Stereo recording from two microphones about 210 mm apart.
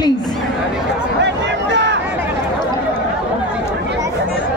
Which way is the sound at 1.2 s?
55° right (ahead or behind).